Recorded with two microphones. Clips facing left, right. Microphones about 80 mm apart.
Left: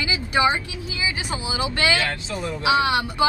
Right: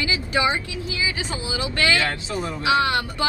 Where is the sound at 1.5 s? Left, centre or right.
Left.